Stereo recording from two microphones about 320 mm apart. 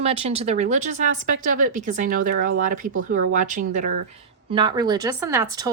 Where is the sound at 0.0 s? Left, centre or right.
Centre.